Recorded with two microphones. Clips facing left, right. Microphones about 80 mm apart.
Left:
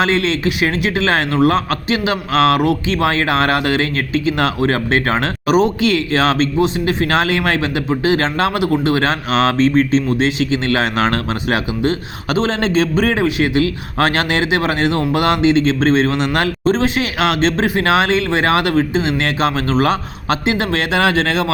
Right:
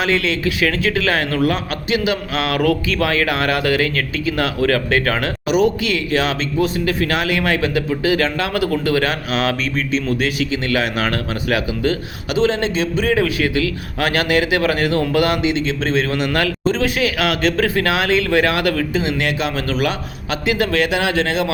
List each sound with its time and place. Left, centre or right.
0.0 s a man's voice: left
12.3 s a man's voice: left
13.1 s a man's voice: left